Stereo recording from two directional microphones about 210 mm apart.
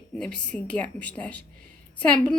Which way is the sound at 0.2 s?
5° left (ahead or behind).